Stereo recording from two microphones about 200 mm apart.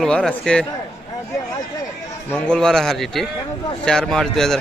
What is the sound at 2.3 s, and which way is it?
A man's voice, 5° left (ahead or behind).